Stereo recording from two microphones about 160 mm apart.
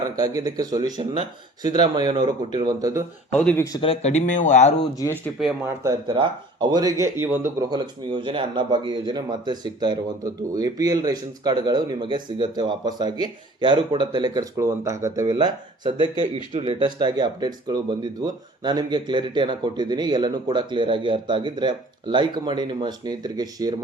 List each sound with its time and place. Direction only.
0.2 s speech: 25° right (ahead or behind)
3.4 s speech: 10° left (ahead or behind)
3.7 s speech: 35° left (ahead or behind)
5.8 s speech: 25° right (ahead or behind)
7.7 s speech: 30° right (ahead or behind)